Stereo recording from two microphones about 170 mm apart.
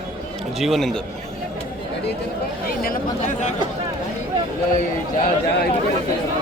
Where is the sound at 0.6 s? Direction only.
Centre (ahead or behind).